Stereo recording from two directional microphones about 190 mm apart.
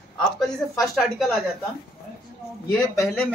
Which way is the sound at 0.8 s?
Centre (ahead or behind).